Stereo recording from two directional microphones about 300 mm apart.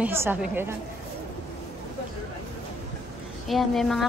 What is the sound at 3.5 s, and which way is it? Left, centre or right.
Speech, centre.